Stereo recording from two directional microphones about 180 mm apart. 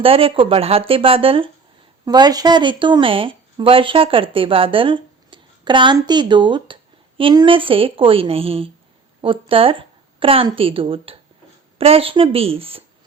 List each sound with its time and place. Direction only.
0.0 s a woman's voice: 30° right (ahead or behind)